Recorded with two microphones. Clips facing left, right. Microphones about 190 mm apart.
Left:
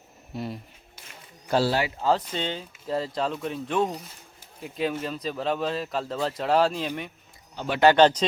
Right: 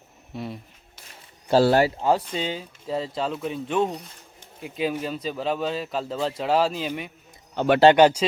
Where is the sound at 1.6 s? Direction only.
45° right (ahead or behind).